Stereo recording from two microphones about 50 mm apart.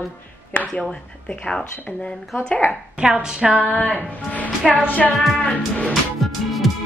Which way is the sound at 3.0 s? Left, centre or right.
Centre.